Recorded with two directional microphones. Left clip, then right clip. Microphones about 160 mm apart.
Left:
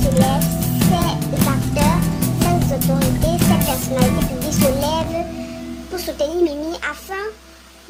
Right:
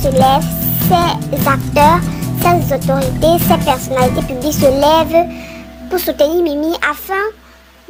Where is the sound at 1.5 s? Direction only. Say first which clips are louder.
Right 12 dB; 45° right (ahead or behind).